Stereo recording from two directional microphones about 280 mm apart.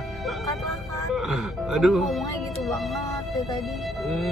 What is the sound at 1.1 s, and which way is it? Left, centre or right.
Speech, centre.